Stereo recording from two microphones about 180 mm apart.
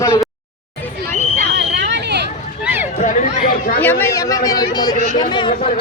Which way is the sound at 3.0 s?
45° left (ahead or behind).